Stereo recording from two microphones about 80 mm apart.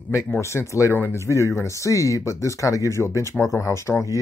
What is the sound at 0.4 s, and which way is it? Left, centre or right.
Speech, left.